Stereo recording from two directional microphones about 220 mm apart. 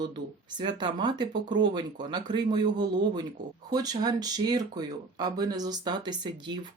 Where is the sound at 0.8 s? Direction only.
20° right (ahead or behind).